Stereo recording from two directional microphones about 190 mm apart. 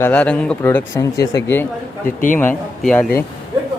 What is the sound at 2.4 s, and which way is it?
Speech, 10° left (ahead or behind).